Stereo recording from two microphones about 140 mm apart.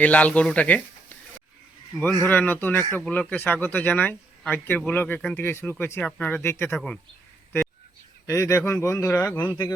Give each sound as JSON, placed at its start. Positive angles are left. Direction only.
{"t": 0.0, "sound": "speech", "side_deg": 10}
{"t": 2.2, "sound": "speech", "side_deg": 15}
{"t": 8.3, "sound": "speech", "side_deg": 20}